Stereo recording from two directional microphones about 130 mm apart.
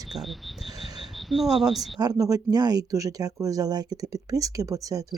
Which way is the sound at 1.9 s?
30° right (ahead or behind).